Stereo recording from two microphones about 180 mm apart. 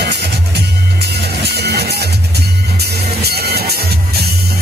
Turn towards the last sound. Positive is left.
turn(degrees=-60)  # may be behind; listen again after turning